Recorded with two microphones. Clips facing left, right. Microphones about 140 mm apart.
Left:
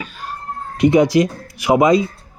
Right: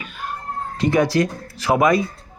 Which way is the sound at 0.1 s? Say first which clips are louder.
Even; 35° left (ahead or behind).